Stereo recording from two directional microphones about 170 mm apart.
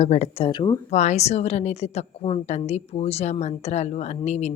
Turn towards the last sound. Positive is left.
turn(degrees=40)  # may be behind; listen again after turning